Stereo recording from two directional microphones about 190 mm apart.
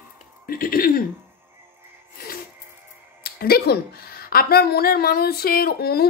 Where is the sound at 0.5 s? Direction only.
50° left (ahead or behind).